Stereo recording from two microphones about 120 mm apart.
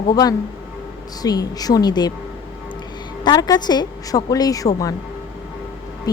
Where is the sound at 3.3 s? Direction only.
35° left (ahead or behind).